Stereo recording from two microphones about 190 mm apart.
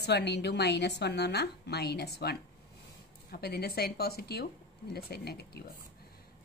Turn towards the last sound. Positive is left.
turn(degrees=55)  # may be behind; listen again after turning